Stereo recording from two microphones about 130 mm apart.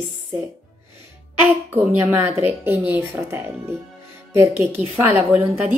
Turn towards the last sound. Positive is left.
turn(degrees=-15)  # may be behind; listen again after turning